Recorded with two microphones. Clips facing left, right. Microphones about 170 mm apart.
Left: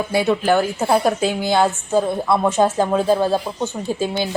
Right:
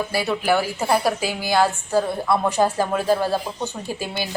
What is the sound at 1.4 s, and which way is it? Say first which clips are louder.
A woman's voice: left 2 dB; 20° left (ahead or behind).